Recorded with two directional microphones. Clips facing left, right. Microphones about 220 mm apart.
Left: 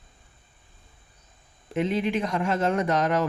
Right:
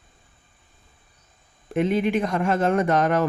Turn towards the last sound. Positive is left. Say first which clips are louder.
# right 3 dB
turn(degrees=-55)  # may be behind; listen again after turning